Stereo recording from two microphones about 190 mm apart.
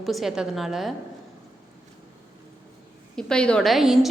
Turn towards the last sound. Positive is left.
turn(degrees=0)  # may be behind; listen again after turning